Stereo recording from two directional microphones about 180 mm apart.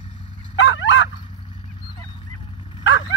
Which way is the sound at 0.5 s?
90° left.